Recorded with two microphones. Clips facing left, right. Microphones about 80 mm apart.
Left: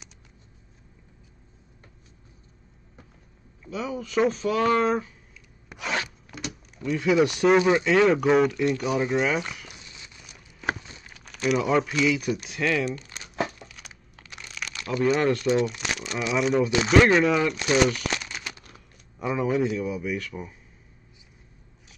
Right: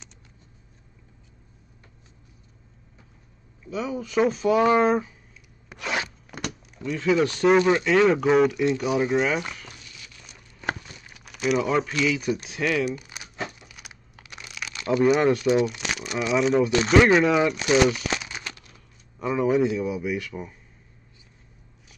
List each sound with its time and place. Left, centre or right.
3.7 s speech: centre
4.6 s speech: centre
4.8 s speech: centre
5.7 s a sound: centre
6.8 s speech: centre
9.8 s a sound: left
10.2 s a sound: centre
11.1 s speech: centre
12.6 s crumpling: centre
14.9 s speech: centre